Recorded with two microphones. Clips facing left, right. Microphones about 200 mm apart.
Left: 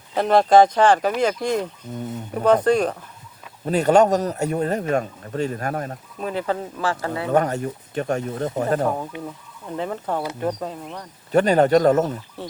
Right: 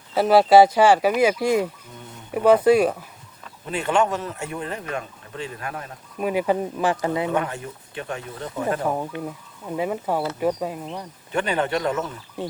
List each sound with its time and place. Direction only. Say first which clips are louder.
0.1 s speech: right 1 dB; 5° right (ahead or behind)
3.7 s speech: left 6 dB; 40° left (ahead or behind)
6.1 s speech: right 3 dB; 10° right (ahead or behind)
7.3 s speech: left 6 dB; 40° left (ahead or behind)
9.1 s speech: right 2 dB; 15° left (ahead or behind)
9.6 s speech: right 2 dB; 10° right (ahead or behind)
11.3 s speech: left 8 dB; 40° left (ahead or behind)
12.4 s speech: right 9 dB; 15° right (ahead or behind)